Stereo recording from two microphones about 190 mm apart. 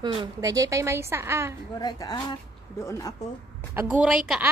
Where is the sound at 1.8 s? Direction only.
20° left (ahead or behind).